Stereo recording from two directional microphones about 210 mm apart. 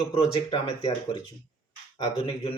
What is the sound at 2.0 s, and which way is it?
Speech, 25° left (ahead or behind).